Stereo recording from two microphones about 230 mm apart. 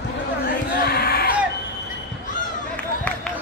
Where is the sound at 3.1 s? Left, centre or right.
Centre.